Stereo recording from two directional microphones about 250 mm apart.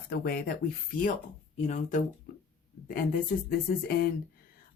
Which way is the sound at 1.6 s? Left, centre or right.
Left.